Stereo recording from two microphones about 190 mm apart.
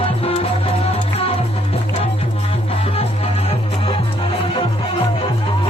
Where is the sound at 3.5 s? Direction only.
30° left (ahead or behind).